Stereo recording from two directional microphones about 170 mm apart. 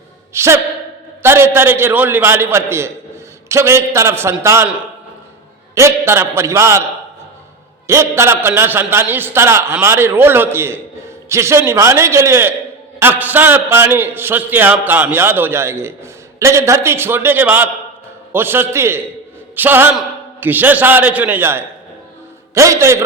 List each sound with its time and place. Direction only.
0.3 s a man's voice: 15° right (ahead or behind)
5.7 s a man's voice: 15° right (ahead or behind)
7.9 s a man's voice: 15° right (ahead or behind)